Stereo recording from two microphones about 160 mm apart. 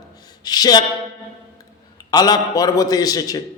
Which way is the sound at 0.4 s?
25° left (ahead or behind).